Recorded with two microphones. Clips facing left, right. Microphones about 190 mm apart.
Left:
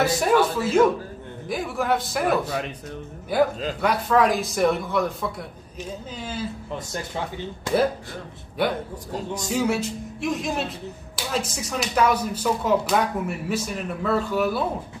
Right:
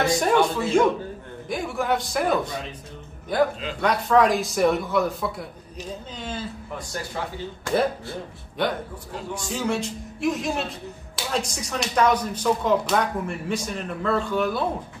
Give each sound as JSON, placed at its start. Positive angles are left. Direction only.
{"t": 0.0, "sound": "speech", "side_deg": 5}
{"t": 8.6, "sound": "speech", "side_deg": 10}
{"t": 9.1, "sound": "a man's voice", "side_deg": 40}
{"t": 9.5, "sound": "speech", "side_deg": 10}